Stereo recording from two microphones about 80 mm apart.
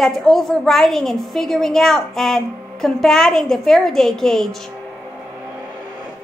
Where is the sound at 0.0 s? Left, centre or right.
Centre.